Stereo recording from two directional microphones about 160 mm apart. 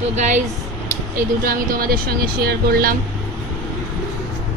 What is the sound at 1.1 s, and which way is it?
Speech, 60° right (ahead or behind).